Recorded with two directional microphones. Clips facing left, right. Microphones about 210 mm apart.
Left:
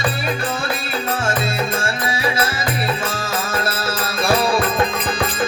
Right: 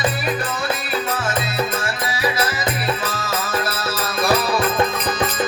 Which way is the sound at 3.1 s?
25° left (ahead or behind).